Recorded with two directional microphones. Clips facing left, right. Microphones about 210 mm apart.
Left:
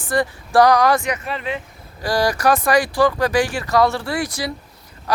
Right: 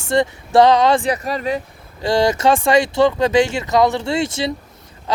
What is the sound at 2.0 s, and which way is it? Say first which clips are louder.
Speech: right 3 dB; 25° right (ahead or behind).